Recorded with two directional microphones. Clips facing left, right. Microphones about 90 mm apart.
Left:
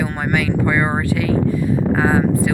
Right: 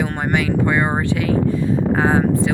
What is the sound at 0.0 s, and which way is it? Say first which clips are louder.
Speech: even; 25° right (ahead or behind).